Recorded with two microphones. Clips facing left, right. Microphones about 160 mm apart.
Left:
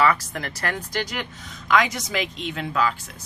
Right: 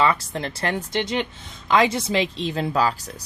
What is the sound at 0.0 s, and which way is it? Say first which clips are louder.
Speech: even; 25° right (ahead or behind).